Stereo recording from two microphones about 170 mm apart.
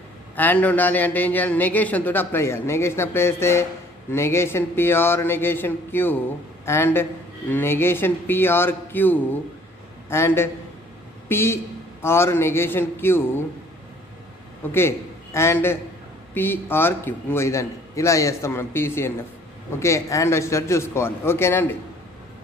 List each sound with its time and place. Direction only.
0.4 s a man's voice: 10° left (ahead or behind)
14.7 s a man's voice: 15° left (ahead or behind)